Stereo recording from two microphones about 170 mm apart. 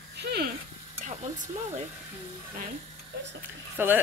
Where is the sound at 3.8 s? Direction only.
10° right (ahead or behind).